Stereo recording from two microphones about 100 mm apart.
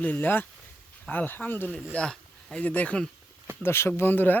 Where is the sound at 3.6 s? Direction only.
25° left (ahead or behind).